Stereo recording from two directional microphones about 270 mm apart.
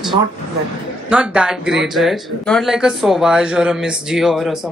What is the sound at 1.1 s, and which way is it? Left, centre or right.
Speech, centre.